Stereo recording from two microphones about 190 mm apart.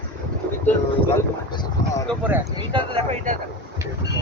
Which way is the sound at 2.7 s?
30° right (ahead or behind).